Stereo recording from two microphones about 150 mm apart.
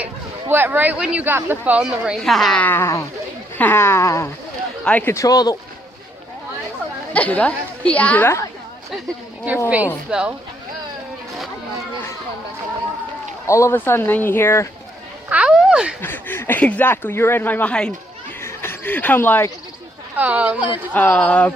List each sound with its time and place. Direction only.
0.0 s speech: 15° right (ahead or behind); by 5.5 s 25° left (ahead or behind)
7.1 s speech: 10° left (ahead or behind)
9.6 s speech: 10° right (ahead or behind)
13.5 s speech: 20° left (ahead or behind)
15.3 s a sound: 5° right (ahead or behind)
16.0 s speech: 15° left (ahead or behind)
20.1 s speech: 10° right (ahead or behind)
20.9 s speech: 10° left (ahead or behind)